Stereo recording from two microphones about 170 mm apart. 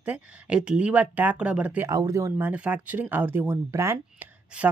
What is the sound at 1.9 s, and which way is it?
Speech, 20° right (ahead or behind).